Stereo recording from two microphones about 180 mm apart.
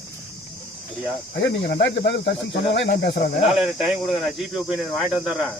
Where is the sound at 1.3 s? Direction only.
80° left.